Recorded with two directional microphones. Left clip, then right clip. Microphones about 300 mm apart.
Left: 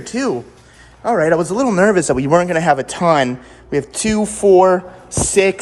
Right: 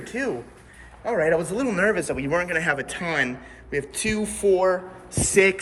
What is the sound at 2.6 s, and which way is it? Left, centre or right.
A man's voice, centre.